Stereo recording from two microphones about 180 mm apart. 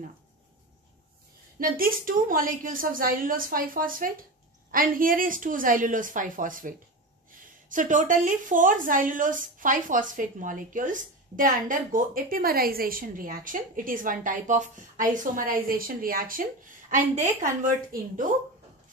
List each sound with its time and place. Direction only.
1.6 s a woman's voice: 50° right (ahead or behind)